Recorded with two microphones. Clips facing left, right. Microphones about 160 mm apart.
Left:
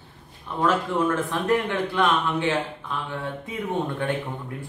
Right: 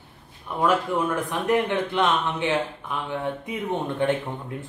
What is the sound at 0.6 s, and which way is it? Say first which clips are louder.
Speech: even; 10° right (ahead or behind).